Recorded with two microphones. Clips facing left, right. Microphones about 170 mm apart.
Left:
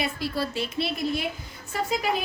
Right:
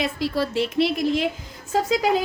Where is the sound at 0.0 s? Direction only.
90° right.